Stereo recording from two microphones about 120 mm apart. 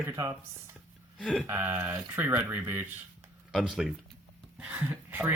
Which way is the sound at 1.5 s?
15° right (ahead or behind).